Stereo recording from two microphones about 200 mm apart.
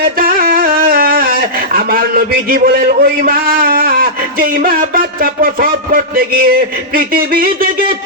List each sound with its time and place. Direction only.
0.2 s a man's voice: 45° right (ahead or behind)